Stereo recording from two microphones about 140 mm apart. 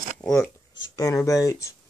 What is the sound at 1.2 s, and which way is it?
Speech, 25° left (ahead or behind).